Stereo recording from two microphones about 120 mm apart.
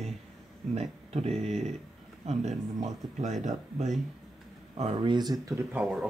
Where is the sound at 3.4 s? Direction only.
85° right.